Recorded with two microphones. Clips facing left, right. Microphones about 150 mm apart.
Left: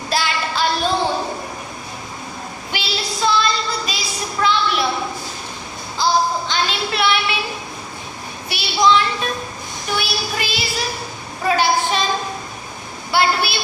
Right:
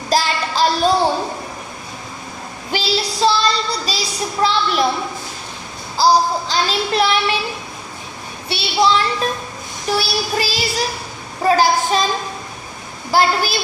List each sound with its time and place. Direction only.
0.1 s child singing: 35° right (ahead or behind)
2.7 s child singing: 35° right (ahead or behind)
6.0 s child singing: 35° right (ahead or behind)
8.4 s a child's voice: 30° right (ahead or behind)
9.9 s child singing: 35° right (ahead or behind)
13.1 s child singing: 40° right (ahead or behind)